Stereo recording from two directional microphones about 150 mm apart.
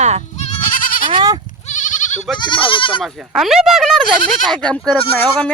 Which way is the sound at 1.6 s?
55° left (ahead or behind).